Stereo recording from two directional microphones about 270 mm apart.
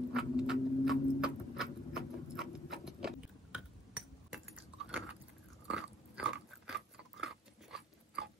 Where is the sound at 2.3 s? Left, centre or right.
Centre.